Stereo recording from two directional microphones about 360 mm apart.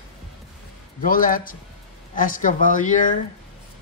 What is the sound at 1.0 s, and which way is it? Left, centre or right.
Speech, left.